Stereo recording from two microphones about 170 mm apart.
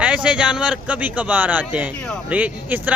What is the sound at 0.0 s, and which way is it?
Speech, 5° right (ahead or behind).